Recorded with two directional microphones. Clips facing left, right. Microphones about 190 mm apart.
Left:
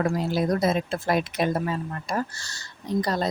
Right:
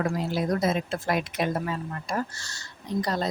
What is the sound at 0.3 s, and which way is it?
Speech, 35° left (ahead or behind).